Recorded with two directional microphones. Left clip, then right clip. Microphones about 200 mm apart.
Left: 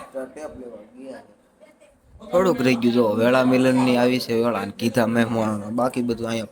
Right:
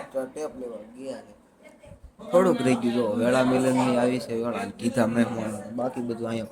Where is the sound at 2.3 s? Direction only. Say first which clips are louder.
Left 1 dB; 10° left (ahead or behind).